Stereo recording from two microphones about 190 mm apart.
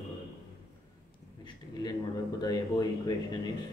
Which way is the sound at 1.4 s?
20° left (ahead or behind).